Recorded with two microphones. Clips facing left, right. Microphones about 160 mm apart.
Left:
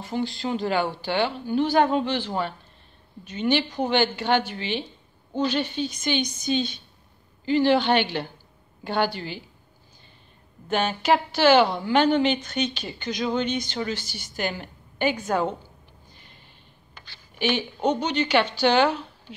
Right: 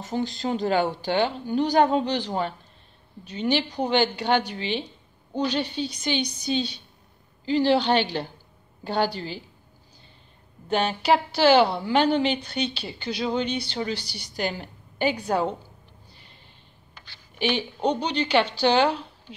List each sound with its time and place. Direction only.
0.0 s speech: 45° right (ahead or behind)
10.7 s speech: 35° right (ahead or behind)
16.9 s a sound: 45° left (ahead or behind)
18.0 s speech: 35° right (ahead or behind)